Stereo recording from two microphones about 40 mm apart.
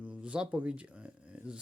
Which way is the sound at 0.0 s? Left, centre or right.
Right.